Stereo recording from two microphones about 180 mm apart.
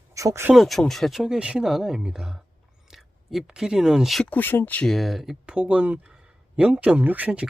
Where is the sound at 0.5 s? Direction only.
Centre (ahead or behind).